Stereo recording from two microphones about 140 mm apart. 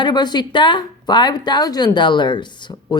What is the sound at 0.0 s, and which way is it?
A woman's voice, 30° left (ahead or behind).